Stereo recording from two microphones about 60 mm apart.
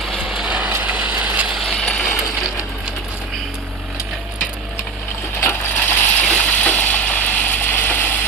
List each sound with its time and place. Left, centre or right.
0.3 s vehicle: centre
0.7 s mechanisms: right
1.6 s coin: centre
5.5 s coin: left
6.2 s engine: centre